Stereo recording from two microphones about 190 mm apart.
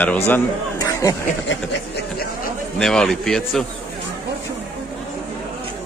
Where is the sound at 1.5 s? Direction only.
55° left (ahead or behind).